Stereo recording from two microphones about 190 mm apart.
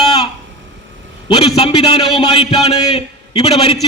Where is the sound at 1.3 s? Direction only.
30° left (ahead or behind).